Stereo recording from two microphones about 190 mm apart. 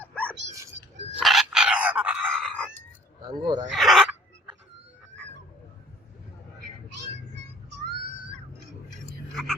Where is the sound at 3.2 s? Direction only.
20° right (ahead or behind).